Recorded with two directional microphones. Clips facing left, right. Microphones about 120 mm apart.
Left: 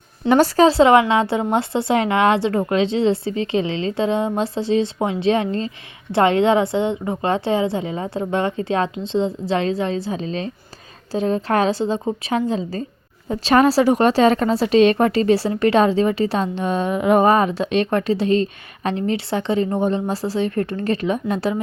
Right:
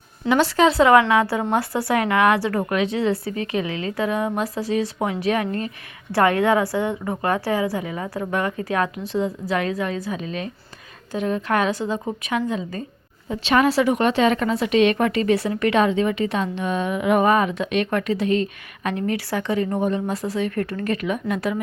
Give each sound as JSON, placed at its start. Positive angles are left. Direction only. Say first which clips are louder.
{"t": 0.3, "sound": "a woman's voice", "louder": "left 4 dB", "side_deg": 40}